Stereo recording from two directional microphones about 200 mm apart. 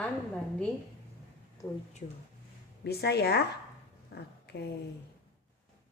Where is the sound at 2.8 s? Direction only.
55° left (ahead or behind).